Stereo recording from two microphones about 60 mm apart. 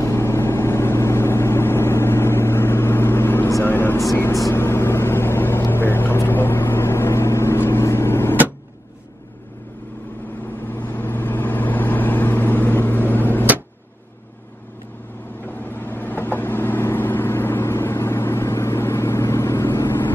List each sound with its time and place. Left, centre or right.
0.0 s vehicle: left
10.7 s vehicle: left
15.4 s vehicle: left